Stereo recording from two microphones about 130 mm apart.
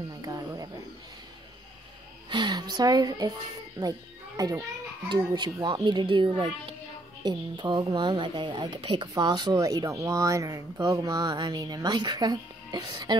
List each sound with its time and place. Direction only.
0.1 s a sound: 30° right (ahead or behind)
2.2 s music: 35° right (ahead or behind)
4.4 s speech: 30° right (ahead or behind)